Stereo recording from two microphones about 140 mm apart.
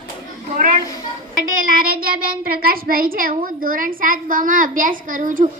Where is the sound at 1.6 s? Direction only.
90° right.